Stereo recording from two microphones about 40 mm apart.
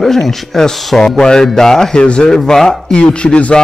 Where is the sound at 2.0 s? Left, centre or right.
Left.